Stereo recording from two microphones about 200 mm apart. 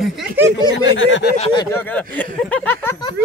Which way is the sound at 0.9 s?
70° left (ahead or behind).